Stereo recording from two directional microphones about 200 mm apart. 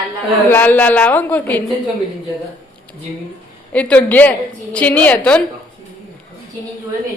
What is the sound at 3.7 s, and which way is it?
A woman's voice, 5° left (ahead or behind).